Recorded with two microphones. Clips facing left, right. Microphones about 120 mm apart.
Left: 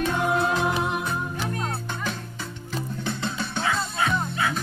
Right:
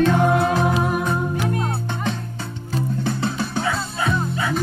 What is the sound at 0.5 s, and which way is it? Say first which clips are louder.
Music: right 5 dB; 45° right (ahead or behind).